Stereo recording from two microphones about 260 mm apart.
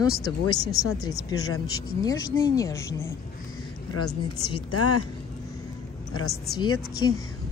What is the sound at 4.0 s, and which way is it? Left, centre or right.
A woman's voice, left.